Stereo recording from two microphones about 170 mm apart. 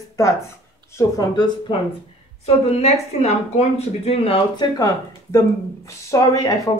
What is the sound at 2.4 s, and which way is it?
A woman's voice, 40° left (ahead or behind).